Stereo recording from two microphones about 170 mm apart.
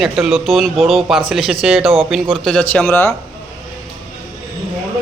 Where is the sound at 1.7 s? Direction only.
35° right (ahead or behind).